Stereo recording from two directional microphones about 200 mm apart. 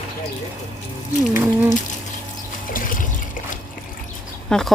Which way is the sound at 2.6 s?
45° left (ahead or behind).